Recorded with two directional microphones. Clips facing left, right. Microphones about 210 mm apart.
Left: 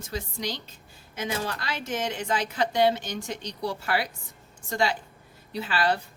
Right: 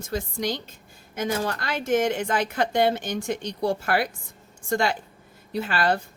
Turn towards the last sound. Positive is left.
turn(degrees=-50)  # may be behind; listen again after turning